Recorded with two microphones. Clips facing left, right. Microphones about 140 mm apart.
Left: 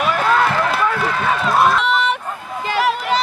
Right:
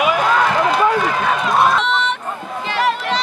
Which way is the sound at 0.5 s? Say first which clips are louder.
Right 3 dB; 15° right (ahead or behind).